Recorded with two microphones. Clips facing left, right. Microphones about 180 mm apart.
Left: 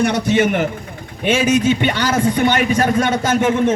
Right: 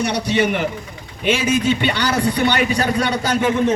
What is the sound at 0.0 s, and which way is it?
A man's voice, 50° left (ahead or behind).